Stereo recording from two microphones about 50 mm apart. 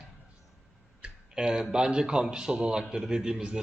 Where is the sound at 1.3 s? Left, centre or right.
Centre.